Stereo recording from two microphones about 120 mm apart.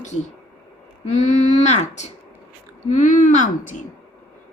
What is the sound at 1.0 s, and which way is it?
Speech, 90° left.